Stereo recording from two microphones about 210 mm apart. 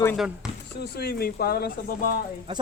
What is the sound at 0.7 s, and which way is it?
Speech, 50° left (ahead or behind).